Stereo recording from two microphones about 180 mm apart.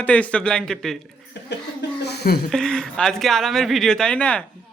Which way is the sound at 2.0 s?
65° left (ahead or behind).